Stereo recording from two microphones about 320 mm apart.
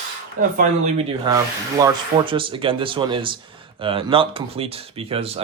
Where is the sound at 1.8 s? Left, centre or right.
Centre.